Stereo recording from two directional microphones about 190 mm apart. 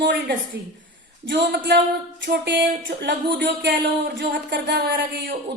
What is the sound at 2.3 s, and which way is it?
A man's voice, 65° right (ahead or behind).